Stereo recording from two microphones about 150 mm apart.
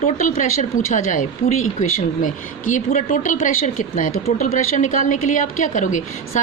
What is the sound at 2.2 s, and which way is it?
A woman's voice, 60° left (ahead or behind).